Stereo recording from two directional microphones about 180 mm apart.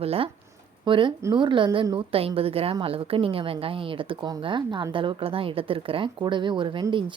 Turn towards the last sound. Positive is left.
turn(degrees=-30)  # may be behind; listen again after turning